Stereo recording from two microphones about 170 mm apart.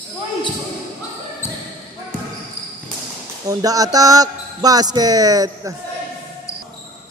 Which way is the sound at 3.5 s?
20° right (ahead or behind).